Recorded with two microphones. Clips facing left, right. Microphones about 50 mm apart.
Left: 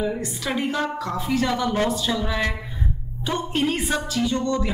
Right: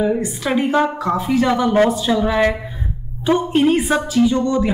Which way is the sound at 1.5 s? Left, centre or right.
Right.